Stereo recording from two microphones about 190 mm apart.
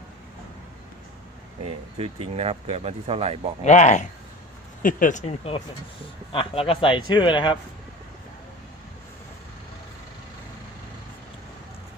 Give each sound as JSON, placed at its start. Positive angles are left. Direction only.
{"t": 1.6, "sound": "speech", "side_deg": -30}
{"t": 3.6, "sound": "speech", "side_deg": 40}